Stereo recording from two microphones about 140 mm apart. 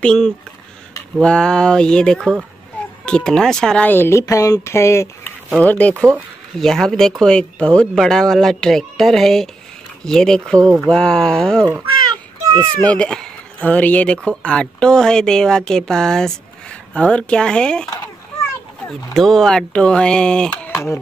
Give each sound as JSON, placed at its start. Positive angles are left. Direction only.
{"t": 0.0, "sound": "speech", "side_deg": 5}
{"t": 2.8, "sound": "a sound", "side_deg": 10}
{"t": 3.1, "sound": "speech", "side_deg": 5}
{"t": 12.8, "sound": "speech", "side_deg": 10}
{"t": 19.1, "sound": "speech", "side_deg": 5}
{"t": 20.7, "sound": "speech", "side_deg": 20}